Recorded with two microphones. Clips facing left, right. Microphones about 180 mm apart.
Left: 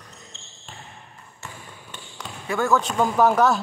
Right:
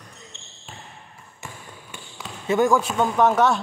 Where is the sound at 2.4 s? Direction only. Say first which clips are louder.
Right 3 dB; 20° right (ahead or behind).